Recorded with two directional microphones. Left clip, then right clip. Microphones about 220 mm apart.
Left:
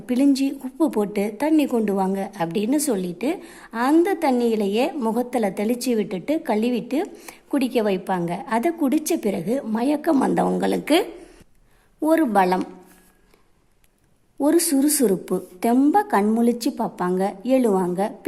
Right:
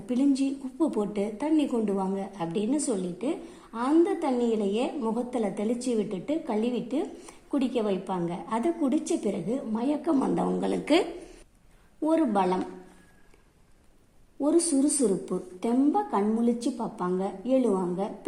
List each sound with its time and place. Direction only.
0.0 s a woman's voice: 30° left (ahead or behind)
12.0 s a woman's voice: 25° left (ahead or behind)
14.3 s a woman's voice: 30° left (ahead or behind)